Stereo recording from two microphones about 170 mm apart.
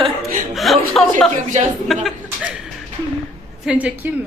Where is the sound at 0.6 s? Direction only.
Centre (ahead or behind).